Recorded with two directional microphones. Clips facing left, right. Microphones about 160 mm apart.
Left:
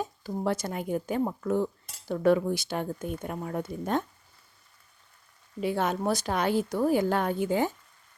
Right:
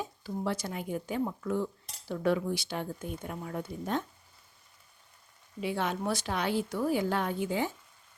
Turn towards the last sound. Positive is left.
turn(degrees=50)  # may be behind; listen again after turning